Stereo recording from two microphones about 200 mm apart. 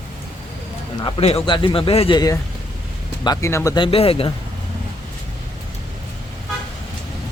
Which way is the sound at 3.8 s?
30° left (ahead or behind).